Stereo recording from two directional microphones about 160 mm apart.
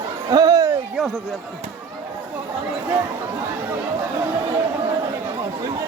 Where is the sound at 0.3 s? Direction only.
25° right (ahead or behind).